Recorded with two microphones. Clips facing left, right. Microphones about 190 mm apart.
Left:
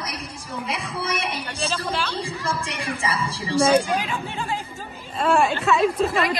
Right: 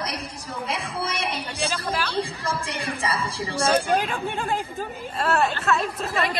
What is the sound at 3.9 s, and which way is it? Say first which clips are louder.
Speech: right 2 dB; 55° right (ahead or behind).